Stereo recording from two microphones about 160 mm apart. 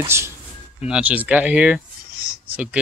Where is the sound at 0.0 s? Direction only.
15° right (ahead or behind).